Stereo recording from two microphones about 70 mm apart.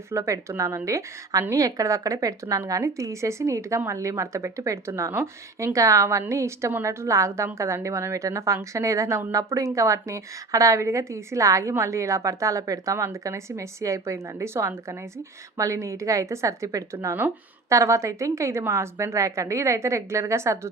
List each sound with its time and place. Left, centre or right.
0.1 s speech: right